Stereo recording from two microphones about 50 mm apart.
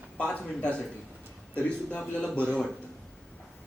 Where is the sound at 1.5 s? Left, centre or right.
Left.